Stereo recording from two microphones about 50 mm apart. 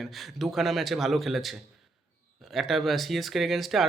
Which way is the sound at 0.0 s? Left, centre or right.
Centre.